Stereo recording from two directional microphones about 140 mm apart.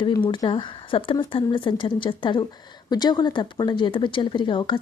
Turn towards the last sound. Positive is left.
turn(degrees=35)  # may be behind; listen again after turning